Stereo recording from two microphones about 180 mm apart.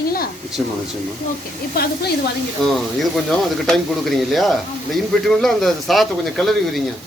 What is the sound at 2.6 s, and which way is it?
Speech, centre (ahead or behind).